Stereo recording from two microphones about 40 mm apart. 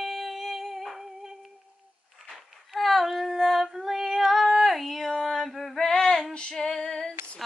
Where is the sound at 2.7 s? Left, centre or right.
Centre.